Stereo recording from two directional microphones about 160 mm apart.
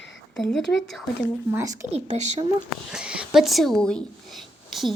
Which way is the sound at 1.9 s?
40° right (ahead or behind).